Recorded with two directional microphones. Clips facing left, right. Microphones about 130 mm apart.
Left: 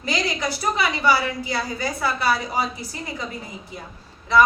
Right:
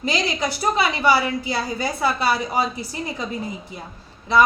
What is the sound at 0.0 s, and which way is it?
A woman's voice, 25° right (ahead or behind).